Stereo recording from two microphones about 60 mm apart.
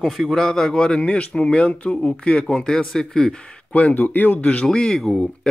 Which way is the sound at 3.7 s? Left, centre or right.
Left.